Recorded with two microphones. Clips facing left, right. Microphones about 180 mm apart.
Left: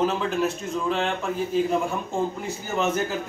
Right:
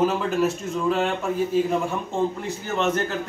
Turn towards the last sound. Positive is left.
turn(degrees=5)  # may be behind; listen again after turning